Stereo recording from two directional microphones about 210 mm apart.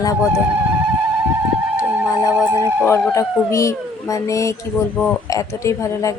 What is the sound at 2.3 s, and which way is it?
Speech, 10° right (ahead or behind).